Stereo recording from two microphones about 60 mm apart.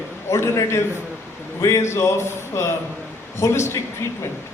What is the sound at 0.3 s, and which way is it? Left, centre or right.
A man's voice, left.